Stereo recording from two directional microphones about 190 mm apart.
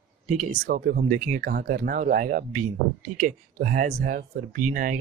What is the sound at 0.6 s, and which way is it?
Speech, 50° right (ahead or behind).